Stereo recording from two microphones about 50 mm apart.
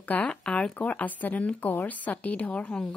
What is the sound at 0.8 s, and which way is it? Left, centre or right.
A woman's voice, left.